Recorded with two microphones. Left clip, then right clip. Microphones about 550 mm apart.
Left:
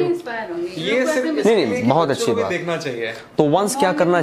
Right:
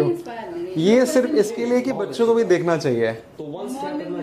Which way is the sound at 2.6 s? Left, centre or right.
Right.